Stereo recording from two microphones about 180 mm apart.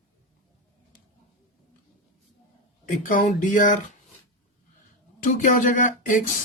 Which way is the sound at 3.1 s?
45° left (ahead or behind).